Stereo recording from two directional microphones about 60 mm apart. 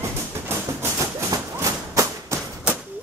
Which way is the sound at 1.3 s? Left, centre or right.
Right.